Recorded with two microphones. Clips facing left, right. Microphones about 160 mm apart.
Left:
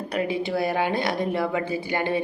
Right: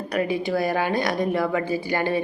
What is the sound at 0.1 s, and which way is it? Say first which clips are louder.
Speech: right 2 dB; 25° left (ahead or behind).